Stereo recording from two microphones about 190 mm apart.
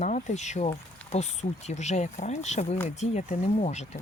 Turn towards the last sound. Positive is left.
turn(degrees=35)  # may be behind; listen again after turning